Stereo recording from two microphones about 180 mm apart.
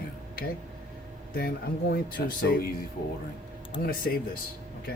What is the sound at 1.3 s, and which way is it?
Speech, 55° left (ahead or behind).